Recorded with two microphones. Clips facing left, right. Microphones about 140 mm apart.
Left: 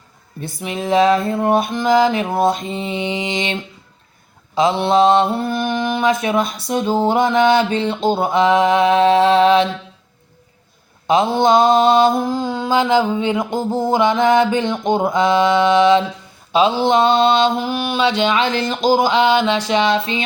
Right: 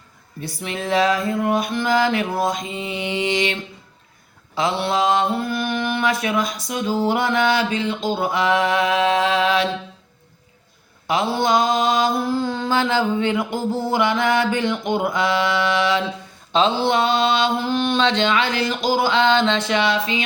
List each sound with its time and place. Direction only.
0.6 s mantra: 20° left (ahead or behind)
1.7 s mantra: 20° left (ahead or behind)
11.0 s mantra: 20° left (ahead or behind)
16.5 s mantra: 10° left (ahead or behind)
17.7 s a sound: 10° left (ahead or behind)